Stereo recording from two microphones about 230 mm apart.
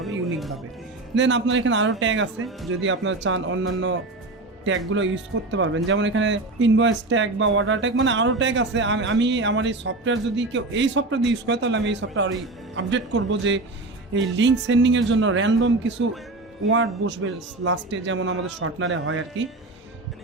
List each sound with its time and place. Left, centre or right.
1.1 s a man's voice: right